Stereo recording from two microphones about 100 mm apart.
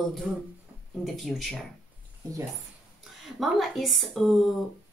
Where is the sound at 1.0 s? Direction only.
Centre (ahead or behind).